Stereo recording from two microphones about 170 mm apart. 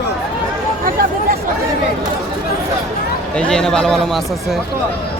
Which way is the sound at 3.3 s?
5° left (ahead or behind).